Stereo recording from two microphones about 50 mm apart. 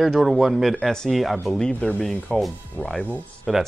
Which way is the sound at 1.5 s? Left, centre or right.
Centre.